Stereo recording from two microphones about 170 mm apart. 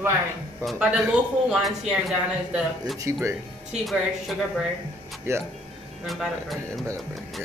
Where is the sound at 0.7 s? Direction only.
10° right (ahead or behind).